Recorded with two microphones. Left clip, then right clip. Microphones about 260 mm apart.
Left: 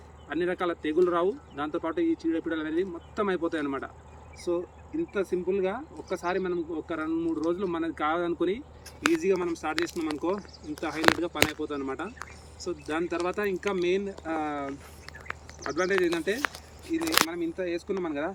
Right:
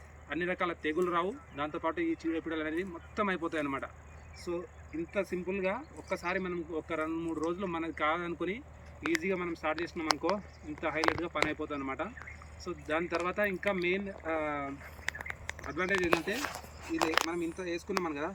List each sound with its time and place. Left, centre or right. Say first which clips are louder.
0.3 s speech: left 4 dB; centre
5.1 s speech: left 6 dB; centre
17.3 s speech: left 5 dB; centre